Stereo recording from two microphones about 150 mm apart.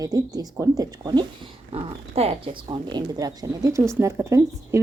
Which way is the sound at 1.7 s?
40° right (ahead or behind).